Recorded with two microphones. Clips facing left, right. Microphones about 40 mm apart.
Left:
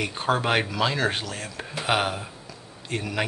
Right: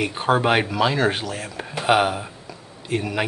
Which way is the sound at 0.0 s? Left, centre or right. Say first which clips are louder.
Right 5 dB; centre.